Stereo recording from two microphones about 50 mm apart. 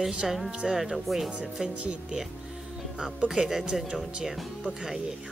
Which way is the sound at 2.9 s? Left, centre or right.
Right.